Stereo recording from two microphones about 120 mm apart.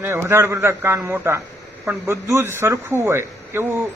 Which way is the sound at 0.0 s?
20° right (ahead or behind).